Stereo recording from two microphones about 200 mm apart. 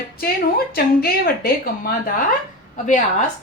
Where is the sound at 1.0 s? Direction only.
50° left (ahead or behind).